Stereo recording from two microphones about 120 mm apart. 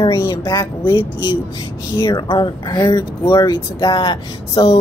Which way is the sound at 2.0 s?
35° left (ahead or behind).